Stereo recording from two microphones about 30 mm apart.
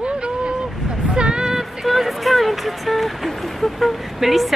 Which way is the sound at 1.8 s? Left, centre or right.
Centre.